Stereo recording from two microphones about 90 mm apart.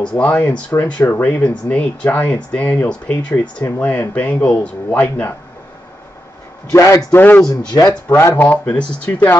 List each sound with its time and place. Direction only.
0.0 s speech: 15° left (ahead or behind)
6.7 s a man's voice: 35° left (ahead or behind)
7.1 s speech: 20° left (ahead or behind)
7.8 s speech: 5° left (ahead or behind)
8.2 s speech: 25° left (ahead or behind)